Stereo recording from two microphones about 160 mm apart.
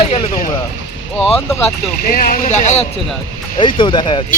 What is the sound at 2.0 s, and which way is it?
Speech, 60° left (ahead or behind).